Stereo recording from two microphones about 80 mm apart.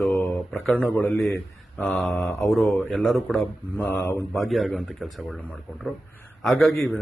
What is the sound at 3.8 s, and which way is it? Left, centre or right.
Speech, left.